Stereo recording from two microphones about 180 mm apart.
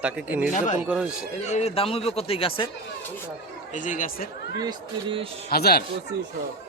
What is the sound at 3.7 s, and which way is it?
Speech, 45° left (ahead or behind).